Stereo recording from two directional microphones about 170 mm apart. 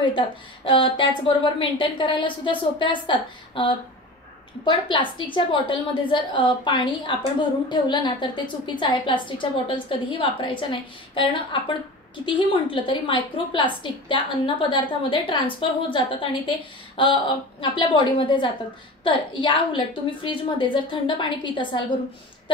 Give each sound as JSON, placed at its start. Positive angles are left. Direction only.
{"t": 0.7, "sound": "a woman's voice", "side_deg": 30}
{"t": 12.3, "sound": "a woman's voice", "side_deg": 30}